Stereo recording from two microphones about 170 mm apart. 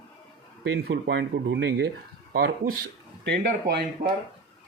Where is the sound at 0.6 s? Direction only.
90° right.